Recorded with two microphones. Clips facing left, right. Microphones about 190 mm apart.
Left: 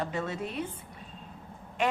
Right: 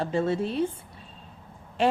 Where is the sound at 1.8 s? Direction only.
30° right (ahead or behind).